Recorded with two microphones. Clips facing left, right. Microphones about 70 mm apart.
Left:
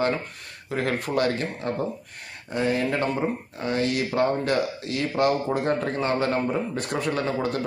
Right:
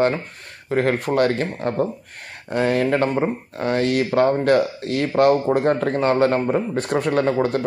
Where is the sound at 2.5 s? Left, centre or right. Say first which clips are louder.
Right 5 dB; right.